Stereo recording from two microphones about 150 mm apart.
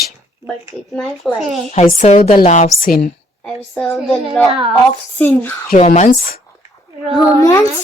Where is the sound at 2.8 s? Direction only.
80° left.